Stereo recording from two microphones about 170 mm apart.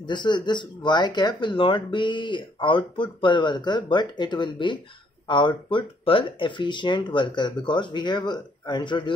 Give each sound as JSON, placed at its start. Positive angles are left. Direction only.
{"t": 0.0, "sound": "speech", "side_deg": 25}